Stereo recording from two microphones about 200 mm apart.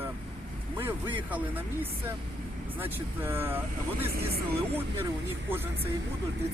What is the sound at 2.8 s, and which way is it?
Speech, 10° right (ahead or behind).